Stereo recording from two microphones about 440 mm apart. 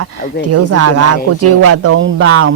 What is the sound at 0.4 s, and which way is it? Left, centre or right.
Speech, right.